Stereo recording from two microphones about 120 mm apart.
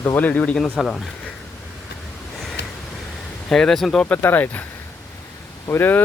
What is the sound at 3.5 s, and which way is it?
Speech, 5° left (ahead or behind).